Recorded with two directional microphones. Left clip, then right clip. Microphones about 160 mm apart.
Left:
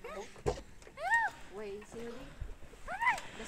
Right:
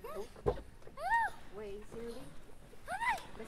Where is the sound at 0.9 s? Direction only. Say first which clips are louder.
Left 2 dB; 35° right (ahead or behind).